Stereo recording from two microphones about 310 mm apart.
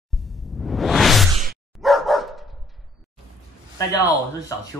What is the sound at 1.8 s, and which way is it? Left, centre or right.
Dog, centre.